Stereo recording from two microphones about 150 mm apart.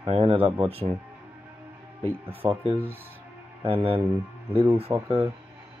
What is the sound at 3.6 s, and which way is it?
Speech, 40° right (ahead or behind).